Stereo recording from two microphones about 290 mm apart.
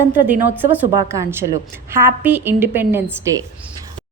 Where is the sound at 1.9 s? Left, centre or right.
Centre.